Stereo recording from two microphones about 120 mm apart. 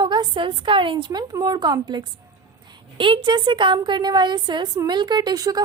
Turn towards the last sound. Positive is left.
turn(degrees=-30)  # may be behind; listen again after turning